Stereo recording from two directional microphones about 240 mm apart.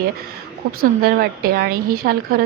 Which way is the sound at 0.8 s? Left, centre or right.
Right.